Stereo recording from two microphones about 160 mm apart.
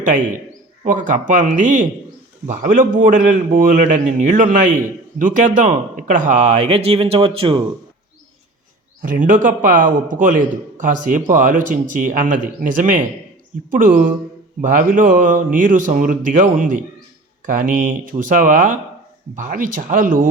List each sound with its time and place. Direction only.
0.9 s a man's voice: 55° right (ahead or behind); by 7.6 s 35° right (ahead or behind)
9.0 s a man's voice: 55° right (ahead or behind)